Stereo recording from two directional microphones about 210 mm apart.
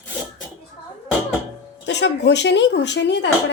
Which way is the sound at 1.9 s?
55° left (ahead or behind).